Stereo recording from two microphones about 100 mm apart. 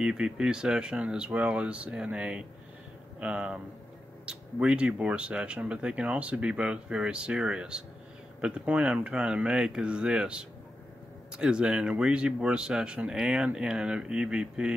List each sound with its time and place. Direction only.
0.0 s speech: 5° right (ahead or behind)